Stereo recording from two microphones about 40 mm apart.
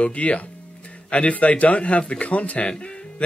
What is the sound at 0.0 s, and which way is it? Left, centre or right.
Speech, left.